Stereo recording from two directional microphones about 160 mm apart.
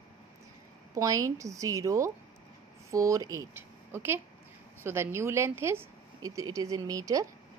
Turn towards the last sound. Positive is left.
turn(degrees=-20)  # may be behind; listen again after turning